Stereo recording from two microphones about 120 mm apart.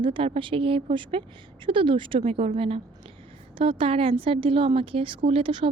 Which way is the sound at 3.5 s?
50° right (ahead or behind).